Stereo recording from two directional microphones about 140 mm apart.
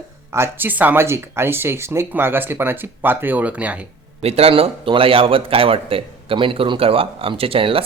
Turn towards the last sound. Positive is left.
turn(degrees=-40)  # may be behind; listen again after turning